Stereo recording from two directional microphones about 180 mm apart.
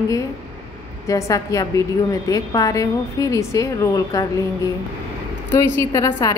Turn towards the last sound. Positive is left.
turn(degrees=20)  # may be behind; listen again after turning